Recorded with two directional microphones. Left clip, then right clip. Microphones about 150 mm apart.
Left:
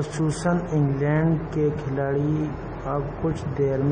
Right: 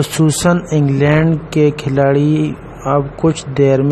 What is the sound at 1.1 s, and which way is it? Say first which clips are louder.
Speech: right 10 dB; 90° right.